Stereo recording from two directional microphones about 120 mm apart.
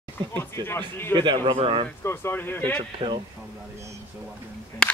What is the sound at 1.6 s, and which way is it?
Speech, 50° right (ahead or behind).